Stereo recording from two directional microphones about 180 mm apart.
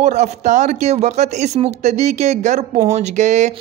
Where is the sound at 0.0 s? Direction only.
40° right (ahead or behind).